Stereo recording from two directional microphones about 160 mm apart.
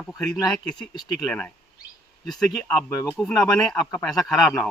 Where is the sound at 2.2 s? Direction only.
5° left (ahead or behind).